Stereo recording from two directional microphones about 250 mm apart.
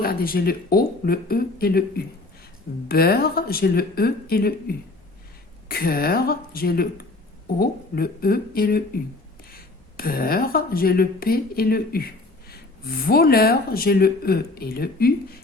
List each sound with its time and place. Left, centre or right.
0.0 s speech: left
5.6 s speech: left
10.0 s speech: left